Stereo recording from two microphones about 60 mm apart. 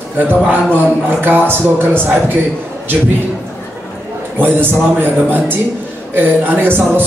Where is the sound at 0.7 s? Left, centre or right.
Right.